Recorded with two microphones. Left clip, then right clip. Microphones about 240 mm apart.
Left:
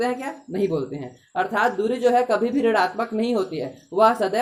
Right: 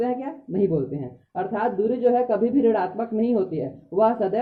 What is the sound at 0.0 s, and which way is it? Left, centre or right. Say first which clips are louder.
Speech: left 1 dB; centre.